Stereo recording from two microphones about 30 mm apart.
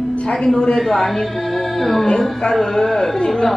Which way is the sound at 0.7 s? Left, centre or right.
Centre.